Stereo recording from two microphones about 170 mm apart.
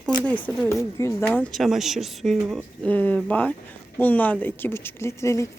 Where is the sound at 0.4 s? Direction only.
15° left (ahead or behind).